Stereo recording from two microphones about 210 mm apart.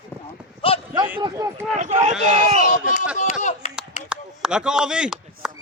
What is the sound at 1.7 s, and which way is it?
Speech, 35° right (ahead or behind).